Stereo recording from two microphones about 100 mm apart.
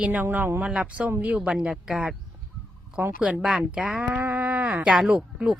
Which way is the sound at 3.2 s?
15° right (ahead or behind).